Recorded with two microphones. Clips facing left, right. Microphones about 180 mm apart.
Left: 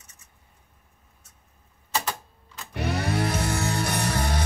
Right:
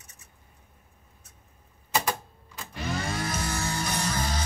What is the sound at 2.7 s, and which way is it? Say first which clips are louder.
Music: left 5 dB; 65° left (ahead or behind).